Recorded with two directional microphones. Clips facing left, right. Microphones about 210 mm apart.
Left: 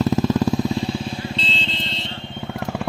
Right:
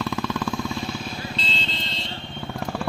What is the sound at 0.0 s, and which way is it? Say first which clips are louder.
Vehicle: left 8 dB; 40° left (ahead or behind).